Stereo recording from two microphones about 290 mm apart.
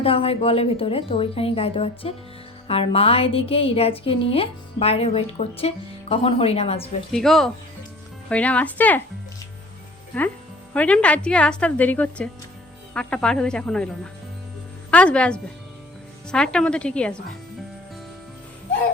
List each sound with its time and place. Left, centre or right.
0.0 s speech: centre
7.1 s a woman's voice: centre
10.8 s a woman's voice: centre